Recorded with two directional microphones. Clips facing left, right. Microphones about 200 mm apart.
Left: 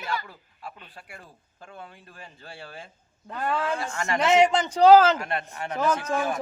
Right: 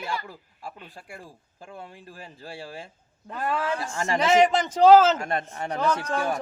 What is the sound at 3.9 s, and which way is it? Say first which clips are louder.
Speech: right 2 dB; 30° right (ahead or behind).